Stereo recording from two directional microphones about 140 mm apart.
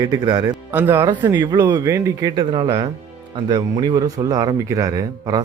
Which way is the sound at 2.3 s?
35° right (ahead or behind).